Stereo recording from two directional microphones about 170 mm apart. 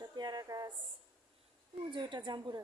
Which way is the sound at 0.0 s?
25° right (ahead or behind).